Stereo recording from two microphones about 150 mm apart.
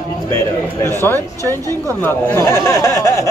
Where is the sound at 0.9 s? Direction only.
15° left (ahead or behind).